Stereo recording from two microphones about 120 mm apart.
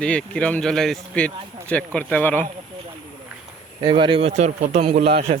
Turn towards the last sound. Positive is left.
turn(degrees=-50)  # may be behind; listen again after turning